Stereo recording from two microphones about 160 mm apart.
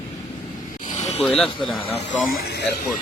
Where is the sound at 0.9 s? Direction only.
50° left (ahead or behind).